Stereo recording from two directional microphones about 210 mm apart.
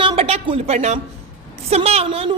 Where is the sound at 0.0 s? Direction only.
25° right (ahead or behind).